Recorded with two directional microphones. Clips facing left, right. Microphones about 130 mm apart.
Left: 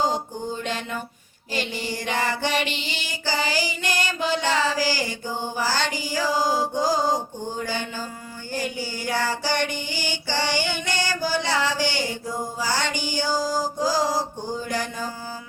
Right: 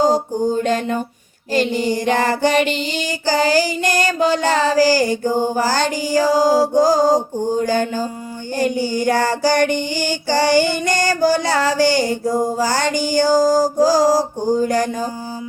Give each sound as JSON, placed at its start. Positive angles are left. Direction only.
{"t": 0.0, "sound": "music", "side_deg": -40}
{"t": 1.5, "sound": "female singing", "side_deg": -45}